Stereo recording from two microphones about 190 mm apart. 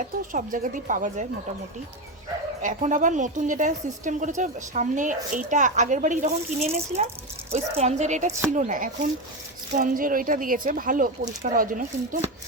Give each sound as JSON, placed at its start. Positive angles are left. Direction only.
{"t": 0.3, "sound": "speech", "side_deg": -45}
{"t": 2.6, "sound": "a woman's voice", "side_deg": -40}